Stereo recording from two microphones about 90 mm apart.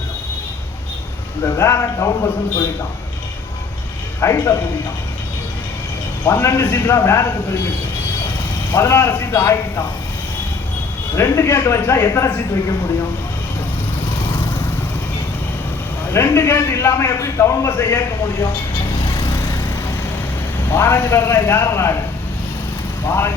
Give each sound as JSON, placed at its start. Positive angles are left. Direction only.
{"t": 1.5, "sound": "a man's voice", "side_deg": 30}
{"t": 4.2, "sound": "speech", "side_deg": 30}
{"t": 6.2, "sound": "speech", "side_deg": 25}
{"t": 8.7, "sound": "speech", "side_deg": 25}
{"t": 11.1, "sound": "speech", "side_deg": 30}
{"t": 14.2, "sound": "vehicle", "side_deg": 65}
{"t": 16.1, "sound": "a man's voice", "side_deg": 30}
{"t": 18.4, "sound": "vehicle", "side_deg": 65}
{"t": 19.4, "sound": "vehicle", "side_deg": 25}
{"t": 20.7, "sound": "speech", "side_deg": 25}
{"t": 23.0, "sound": "a man's voice", "side_deg": 30}